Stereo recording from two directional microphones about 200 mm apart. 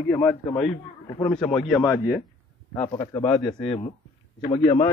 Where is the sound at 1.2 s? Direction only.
5° left (ahead or behind).